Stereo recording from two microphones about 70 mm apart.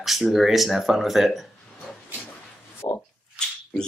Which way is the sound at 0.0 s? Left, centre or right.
Centre.